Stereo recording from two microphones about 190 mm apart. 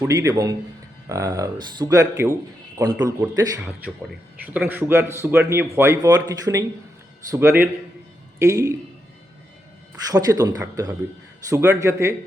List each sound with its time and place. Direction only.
0.0 s a man's voice: 15° right (ahead or behind)
4.4 s a man's voice: 10° right (ahead or behind)
10.1 s a man's voice: 20° right (ahead or behind)